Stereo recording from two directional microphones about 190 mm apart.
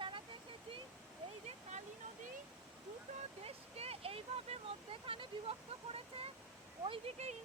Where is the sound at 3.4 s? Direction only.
30° right (ahead or behind).